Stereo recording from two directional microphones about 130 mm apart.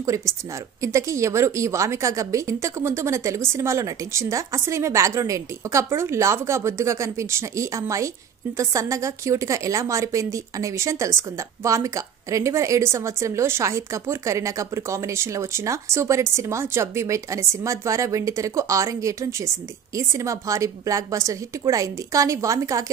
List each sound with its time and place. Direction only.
0.0 s a woman's voice: 25° right (ahead or behind)